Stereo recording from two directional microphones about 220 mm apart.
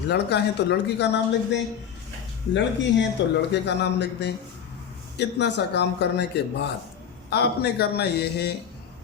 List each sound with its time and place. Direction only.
0.1 s a man's voice: 50° left (ahead or behind)